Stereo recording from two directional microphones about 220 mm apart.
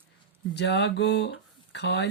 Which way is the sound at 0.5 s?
50° left (ahead or behind).